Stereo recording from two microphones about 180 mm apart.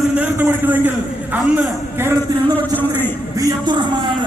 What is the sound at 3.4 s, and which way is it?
Music, 20° right (ahead or behind).